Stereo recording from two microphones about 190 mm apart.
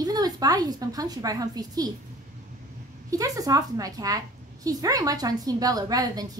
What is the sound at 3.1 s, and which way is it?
A woman's voice, 20° right (ahead or behind).